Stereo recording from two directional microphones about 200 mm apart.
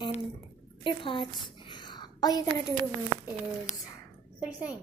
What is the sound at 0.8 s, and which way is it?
Speech, 25° left (ahead or behind).